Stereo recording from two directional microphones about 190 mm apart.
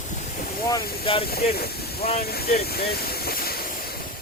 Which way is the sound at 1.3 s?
55° left (ahead or behind).